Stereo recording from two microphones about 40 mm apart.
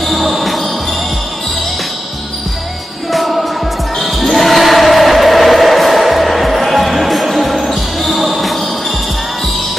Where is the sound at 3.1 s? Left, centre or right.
Centre.